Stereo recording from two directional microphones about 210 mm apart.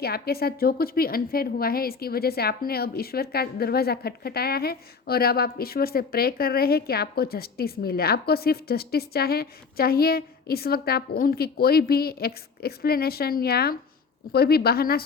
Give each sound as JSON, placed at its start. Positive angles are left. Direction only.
{"t": 0.0, "sound": "a woman's voice", "side_deg": 45}